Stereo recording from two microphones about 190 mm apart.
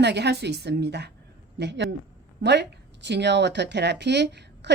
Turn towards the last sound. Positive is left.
turn(degrees=-65)  # may be behind; listen again after turning